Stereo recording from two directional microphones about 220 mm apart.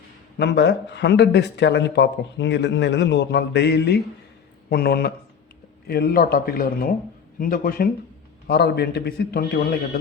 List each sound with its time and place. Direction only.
0.3 s speech: 50° left (ahead or behind)